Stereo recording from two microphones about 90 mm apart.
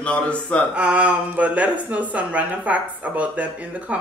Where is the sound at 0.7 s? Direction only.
15° right (ahead or behind).